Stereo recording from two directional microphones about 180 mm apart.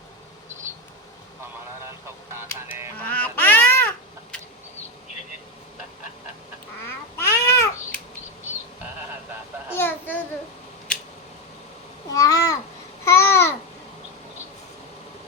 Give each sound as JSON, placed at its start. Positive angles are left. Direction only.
{"t": 2.3, "sound": "music", "side_deg": -15}
{"t": 3.1, "sound": "babbling", "side_deg": 10}
{"t": 7.2, "sound": "babbling", "side_deg": 15}
{"t": 9.7, "sound": "a sound", "side_deg": 10}
{"t": 12.1, "sound": "babbling", "side_deg": 20}